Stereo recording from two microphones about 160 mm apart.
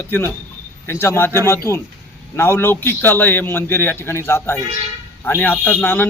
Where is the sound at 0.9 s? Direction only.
15° left (ahead or behind).